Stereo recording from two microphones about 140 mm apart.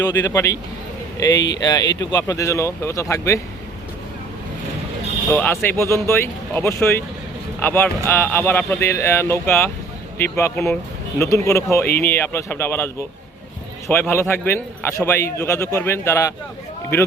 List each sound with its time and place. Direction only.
0.0 s speech: 20° left (ahead or behind)
5.3 s speech: 15° left (ahead or behind)